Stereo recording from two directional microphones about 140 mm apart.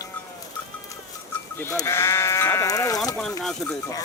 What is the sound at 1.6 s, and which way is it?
Speech, 20° left (ahead or behind).